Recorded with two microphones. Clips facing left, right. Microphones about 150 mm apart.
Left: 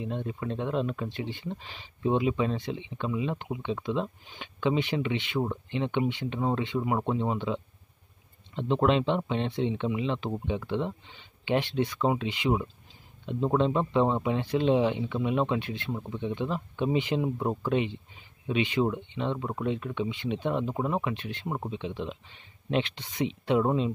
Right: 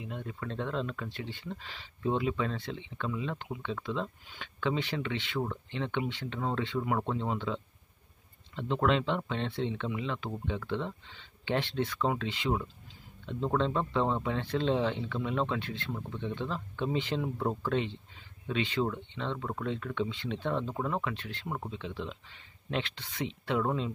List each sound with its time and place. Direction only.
0.0 s speech: 25° left (ahead or behind)